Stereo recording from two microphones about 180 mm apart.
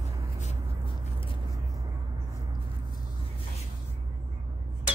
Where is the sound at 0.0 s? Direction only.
40° left (ahead or behind).